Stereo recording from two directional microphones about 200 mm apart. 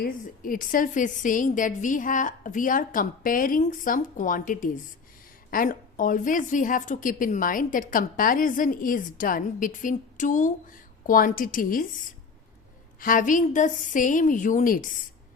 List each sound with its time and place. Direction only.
0.0 s a woman's voice: 45° left (ahead or behind)